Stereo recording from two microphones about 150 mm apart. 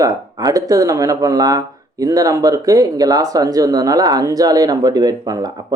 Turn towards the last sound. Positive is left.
turn(degrees=-25)  # may be behind; listen again after turning